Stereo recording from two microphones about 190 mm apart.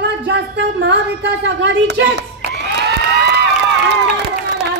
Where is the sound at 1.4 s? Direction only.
65° right (ahead or behind).